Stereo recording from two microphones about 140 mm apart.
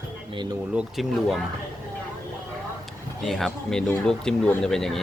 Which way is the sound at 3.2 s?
Centre (ahead or behind).